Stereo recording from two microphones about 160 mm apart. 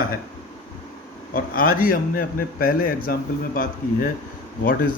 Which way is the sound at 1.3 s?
65° left (ahead or behind).